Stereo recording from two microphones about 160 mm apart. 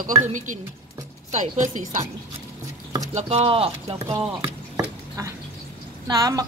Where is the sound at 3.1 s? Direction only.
40° right (ahead or behind).